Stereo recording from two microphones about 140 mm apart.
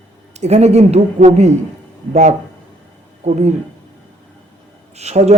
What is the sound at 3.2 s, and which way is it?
Speech, 55° right (ahead or behind).